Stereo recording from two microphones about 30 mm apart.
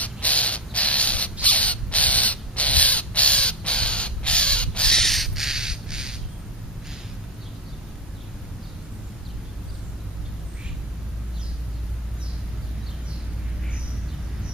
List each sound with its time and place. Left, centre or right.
0.0 s a sound: left
1.4 s crow: left
5.3 s squawk: centre